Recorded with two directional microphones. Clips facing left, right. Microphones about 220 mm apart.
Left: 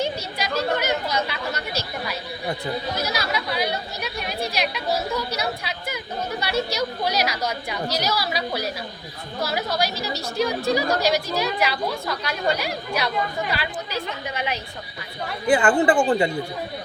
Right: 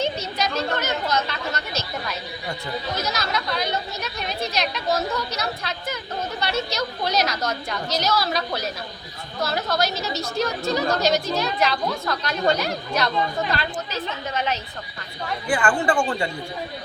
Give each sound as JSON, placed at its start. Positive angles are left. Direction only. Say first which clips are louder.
{"t": 0.0, "sound": "a woman's voice", "louder": "right 1 dB", "side_deg": 10}
{"t": 15.4, "sound": "speech", "louder": "left 4 dB", "side_deg": 20}